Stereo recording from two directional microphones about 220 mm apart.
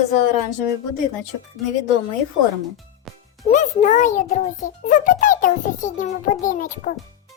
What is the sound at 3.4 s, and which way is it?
A child's voice, 35° left (ahead or behind).